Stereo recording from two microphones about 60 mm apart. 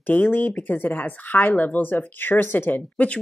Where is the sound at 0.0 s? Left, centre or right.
Left.